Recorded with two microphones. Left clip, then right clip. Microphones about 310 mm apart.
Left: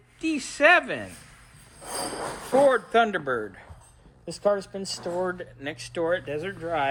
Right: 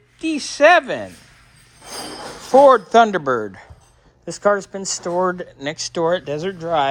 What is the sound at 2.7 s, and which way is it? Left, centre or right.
Speech, centre.